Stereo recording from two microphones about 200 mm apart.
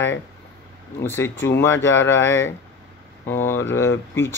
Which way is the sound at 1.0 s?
10° left (ahead or behind).